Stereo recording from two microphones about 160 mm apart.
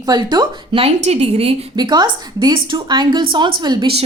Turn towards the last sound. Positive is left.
turn(degrees=-30)  # may be behind; listen again after turning